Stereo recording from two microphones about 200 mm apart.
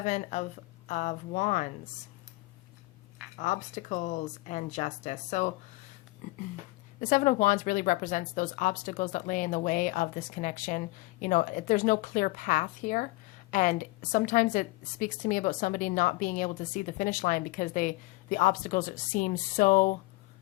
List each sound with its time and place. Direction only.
0.0 s a woman's voice: 35° left (ahead or behind)
3.3 s a woman's voice: 40° left (ahead or behind)
7.0 s a woman's voice: 40° left (ahead or behind)